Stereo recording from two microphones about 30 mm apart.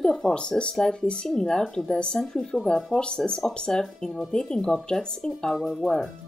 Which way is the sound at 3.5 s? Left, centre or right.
Left.